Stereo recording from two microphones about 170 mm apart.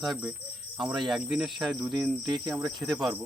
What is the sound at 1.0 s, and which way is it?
Speech, centre (ahead or behind).